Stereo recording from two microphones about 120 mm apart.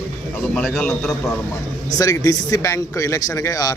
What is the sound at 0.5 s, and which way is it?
Speech, 5° left (ahead or behind).